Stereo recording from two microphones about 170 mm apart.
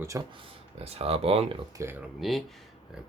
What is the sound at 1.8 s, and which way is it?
Speech, 15° right (ahead or behind).